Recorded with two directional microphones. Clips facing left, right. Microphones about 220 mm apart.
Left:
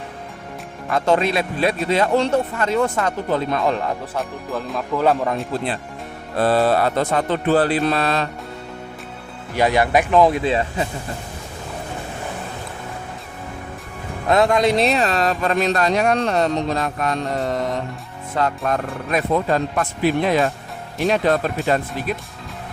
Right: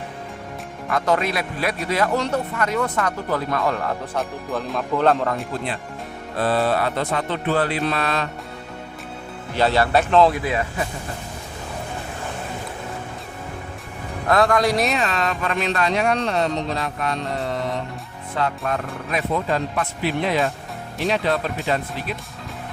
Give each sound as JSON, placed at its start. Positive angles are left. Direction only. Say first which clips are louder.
{"t": 0.9, "sound": "speech", "louder": "left 3 dB", "side_deg": 25}
{"t": 4.1, "sound": "speech", "louder": "even", "side_deg": 0}
{"t": 6.4, "sound": "speech", "louder": "left 4 dB", "side_deg": 40}
{"t": 9.6, "sound": "speech", "louder": "left 1 dB", "side_deg": 15}
{"t": 10.3, "sound": "speech", "louder": "left 4 dB", "side_deg": 25}
{"t": 14.3, "sound": "speech", "louder": "left 2 dB", "side_deg": 20}